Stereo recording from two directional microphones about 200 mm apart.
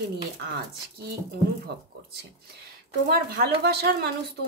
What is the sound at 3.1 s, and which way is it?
Speech, 50° right (ahead or behind).